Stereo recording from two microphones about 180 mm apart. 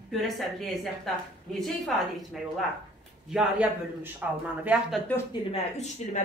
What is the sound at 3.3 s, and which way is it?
A man's voice, 5° right (ahead or behind).